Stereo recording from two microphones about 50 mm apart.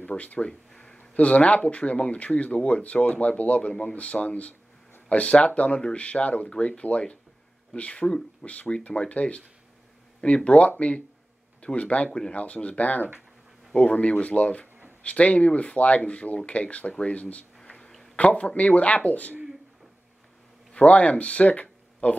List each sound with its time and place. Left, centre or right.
0.0 s speech: left
0.5 s a sound: centre
0.9 s speech: left
17.6 s a sound: centre
18.1 s speech: left
20.7 s speech: left